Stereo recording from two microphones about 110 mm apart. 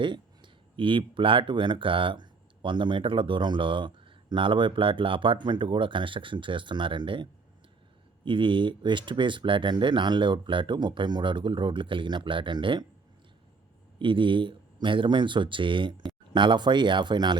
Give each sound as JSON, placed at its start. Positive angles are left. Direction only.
{"t": 0.0, "sound": "speech", "side_deg": -50}
{"t": 14.0, "sound": "speech", "side_deg": -50}